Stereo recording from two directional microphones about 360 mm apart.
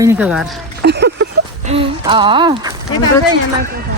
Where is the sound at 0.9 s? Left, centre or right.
Right.